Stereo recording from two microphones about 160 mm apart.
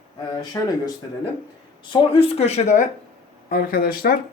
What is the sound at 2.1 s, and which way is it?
Speech, 35° left (ahead or behind).